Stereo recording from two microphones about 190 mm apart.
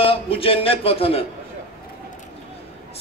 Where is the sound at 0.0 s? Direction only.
30° left (ahead or behind).